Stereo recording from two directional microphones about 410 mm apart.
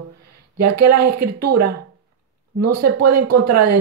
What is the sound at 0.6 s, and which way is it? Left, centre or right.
Speech, right.